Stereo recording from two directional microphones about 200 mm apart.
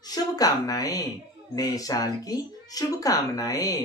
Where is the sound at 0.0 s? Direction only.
20° left (ahead or behind).